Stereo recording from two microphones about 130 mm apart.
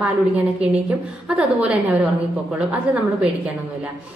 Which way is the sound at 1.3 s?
10° right (ahead or behind).